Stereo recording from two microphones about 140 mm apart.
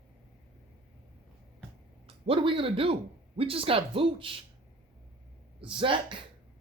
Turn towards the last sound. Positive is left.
turn(degrees=-35)  # may be behind; listen again after turning